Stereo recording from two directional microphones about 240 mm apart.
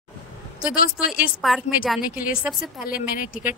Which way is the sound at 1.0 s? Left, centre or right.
Left.